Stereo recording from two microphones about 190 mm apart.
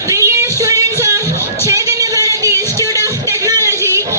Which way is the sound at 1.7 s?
15° right (ahead or behind).